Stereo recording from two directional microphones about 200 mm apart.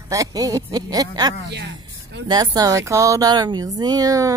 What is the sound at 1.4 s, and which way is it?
Speech, 60° right (ahead or behind).